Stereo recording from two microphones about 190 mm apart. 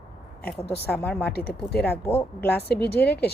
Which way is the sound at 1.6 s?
55° left (ahead or behind).